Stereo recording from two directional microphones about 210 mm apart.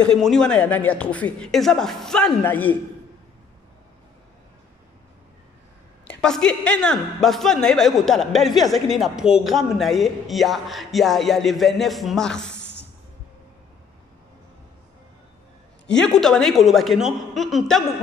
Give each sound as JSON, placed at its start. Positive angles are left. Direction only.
{"t": 0.0, "sound": "speech", "side_deg": 5}
{"t": 6.2, "sound": "speech", "side_deg": 5}
{"t": 12.5, "sound": "a sound", "side_deg": 55}
{"t": 15.9, "sound": "speech", "side_deg": 5}